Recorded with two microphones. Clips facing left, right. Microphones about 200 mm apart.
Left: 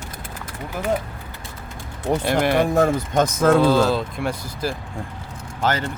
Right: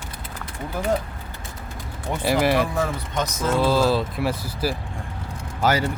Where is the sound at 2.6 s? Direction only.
50° left (ahead or behind).